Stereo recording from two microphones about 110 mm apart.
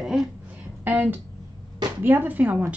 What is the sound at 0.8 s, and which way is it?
A woman's voice, 15° right (ahead or behind).